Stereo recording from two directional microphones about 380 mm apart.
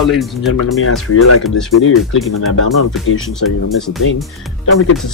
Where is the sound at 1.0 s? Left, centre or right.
Left.